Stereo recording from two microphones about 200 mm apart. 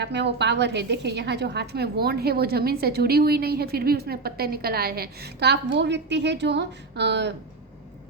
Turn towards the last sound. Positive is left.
turn(degrees=-60)  # may be behind; listen again after turning